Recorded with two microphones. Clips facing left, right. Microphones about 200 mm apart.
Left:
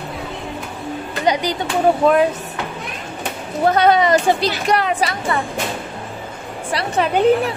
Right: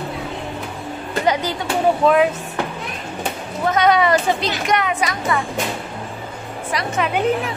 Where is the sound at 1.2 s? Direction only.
15° left (ahead or behind).